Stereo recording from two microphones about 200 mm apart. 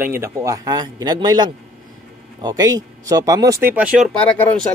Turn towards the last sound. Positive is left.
turn(degrees=5)  # may be behind; listen again after turning